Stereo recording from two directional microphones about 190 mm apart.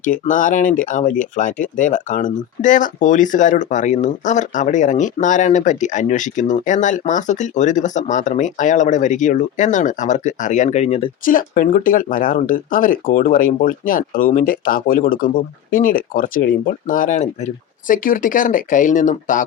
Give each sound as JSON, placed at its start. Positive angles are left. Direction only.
{"t": 0.0, "sound": "speech", "side_deg": 45}
{"t": 11.3, "sound": "speech", "side_deg": 45}